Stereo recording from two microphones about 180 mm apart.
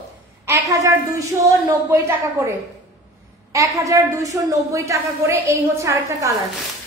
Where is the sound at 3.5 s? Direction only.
15° right (ahead or behind).